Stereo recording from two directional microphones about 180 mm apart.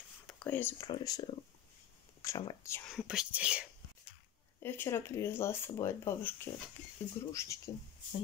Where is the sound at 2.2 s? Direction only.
20° left (ahead or behind).